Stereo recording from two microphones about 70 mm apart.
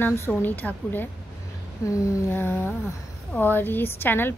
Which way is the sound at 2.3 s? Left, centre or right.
Left.